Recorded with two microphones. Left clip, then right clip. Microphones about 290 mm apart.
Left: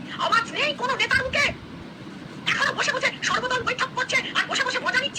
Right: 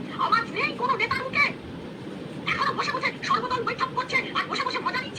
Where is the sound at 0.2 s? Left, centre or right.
Centre.